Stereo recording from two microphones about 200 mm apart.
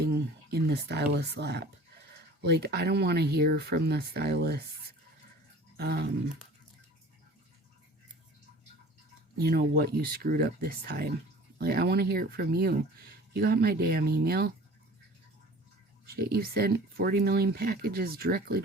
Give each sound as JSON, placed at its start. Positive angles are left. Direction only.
{"t": 0.0, "sound": "speech", "side_deg": -55}
{"t": 5.7, "sound": "dog", "side_deg": -55}
{"t": 9.4, "sound": "speech", "side_deg": -50}
{"t": 16.0, "sound": "speech", "side_deg": -50}